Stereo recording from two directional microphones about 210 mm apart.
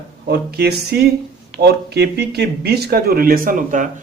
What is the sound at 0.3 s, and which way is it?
Speech, 50° right (ahead or behind).